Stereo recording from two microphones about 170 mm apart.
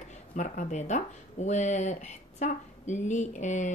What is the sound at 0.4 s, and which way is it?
Speech, 45° left (ahead or behind).